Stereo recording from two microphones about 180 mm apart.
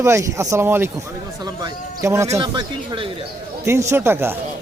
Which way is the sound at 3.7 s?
15° right (ahead or behind).